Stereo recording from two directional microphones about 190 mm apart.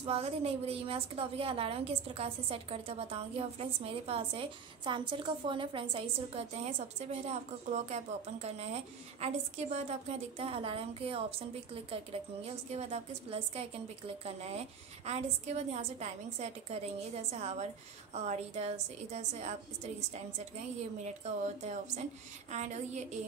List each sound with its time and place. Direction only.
0.0 s a woman's voice: 30° right (ahead or behind)